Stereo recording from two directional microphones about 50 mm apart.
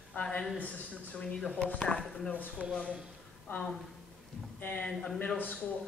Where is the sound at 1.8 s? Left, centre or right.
Centre.